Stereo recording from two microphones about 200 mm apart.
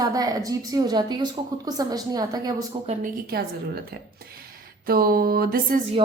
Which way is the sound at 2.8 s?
45° right (ahead or behind).